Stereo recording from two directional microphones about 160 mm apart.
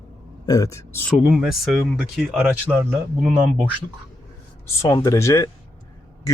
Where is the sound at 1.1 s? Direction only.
Centre (ahead or behind).